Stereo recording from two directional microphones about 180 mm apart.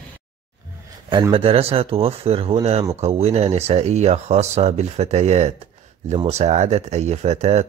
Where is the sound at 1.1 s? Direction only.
30° right (ahead or behind).